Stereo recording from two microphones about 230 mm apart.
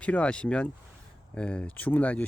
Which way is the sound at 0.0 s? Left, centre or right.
Centre.